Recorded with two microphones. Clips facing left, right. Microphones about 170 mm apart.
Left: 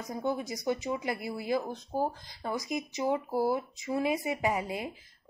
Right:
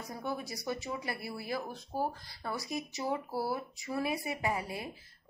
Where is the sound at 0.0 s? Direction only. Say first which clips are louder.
Left 6 dB; 20° left (ahead or behind).